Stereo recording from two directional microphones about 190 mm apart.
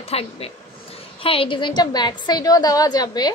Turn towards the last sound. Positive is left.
turn(degrees=20)  # may be behind; listen again after turning